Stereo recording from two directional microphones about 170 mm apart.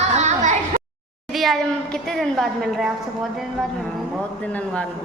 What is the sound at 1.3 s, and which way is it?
A woman's voice, centre (ahead or behind).